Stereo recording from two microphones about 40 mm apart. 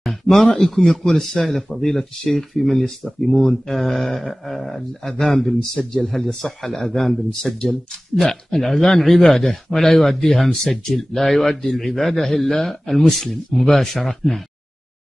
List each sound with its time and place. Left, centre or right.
0.0 s a sound: centre
0.6 s speech: centre
5.6 s speech: centre